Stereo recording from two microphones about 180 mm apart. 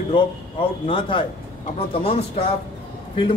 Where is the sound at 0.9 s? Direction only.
30° left (ahead or behind).